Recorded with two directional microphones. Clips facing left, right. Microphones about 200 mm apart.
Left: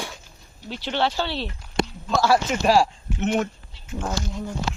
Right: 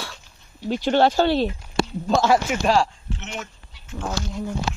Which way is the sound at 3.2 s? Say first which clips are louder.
Left 13 dB; 55° left (ahead or behind).